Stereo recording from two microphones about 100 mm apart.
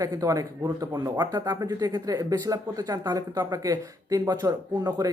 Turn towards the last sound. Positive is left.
turn(degrees=-40)  # may be behind; listen again after turning